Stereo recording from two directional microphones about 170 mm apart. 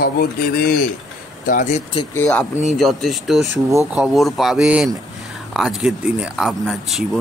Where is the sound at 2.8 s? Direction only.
Centre (ahead or behind).